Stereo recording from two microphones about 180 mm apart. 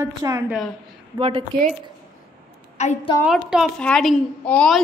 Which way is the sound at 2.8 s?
40° left (ahead or behind).